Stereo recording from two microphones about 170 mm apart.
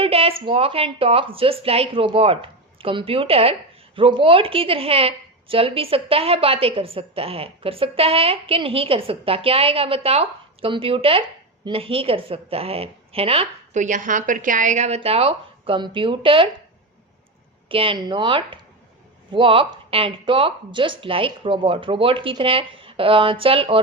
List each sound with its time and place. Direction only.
0.0 s a woman's voice: 35° right (ahead or behind)
17.7 s a woman's voice: 30° right (ahead or behind)